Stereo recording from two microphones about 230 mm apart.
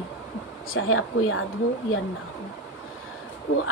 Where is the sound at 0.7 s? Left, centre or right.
Left.